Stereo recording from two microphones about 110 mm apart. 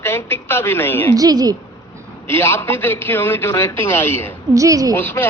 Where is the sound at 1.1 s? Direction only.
35° right (ahead or behind).